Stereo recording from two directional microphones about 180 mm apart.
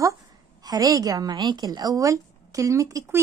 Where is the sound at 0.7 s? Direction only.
20° right (ahead or behind).